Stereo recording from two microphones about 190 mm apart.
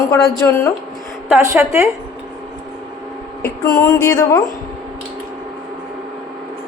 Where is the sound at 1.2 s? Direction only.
10° right (ahead or behind).